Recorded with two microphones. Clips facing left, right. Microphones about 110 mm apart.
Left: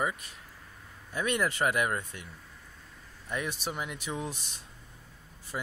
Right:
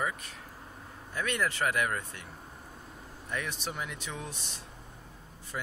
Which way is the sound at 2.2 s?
40° right (ahead or behind).